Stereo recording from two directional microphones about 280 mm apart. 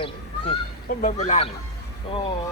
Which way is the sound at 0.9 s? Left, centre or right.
Left.